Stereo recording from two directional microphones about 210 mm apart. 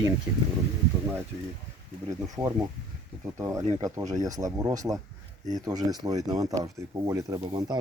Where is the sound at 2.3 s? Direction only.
15° right (ahead or behind).